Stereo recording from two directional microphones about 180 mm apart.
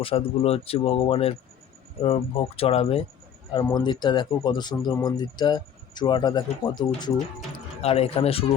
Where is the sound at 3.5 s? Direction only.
20° left (ahead or behind).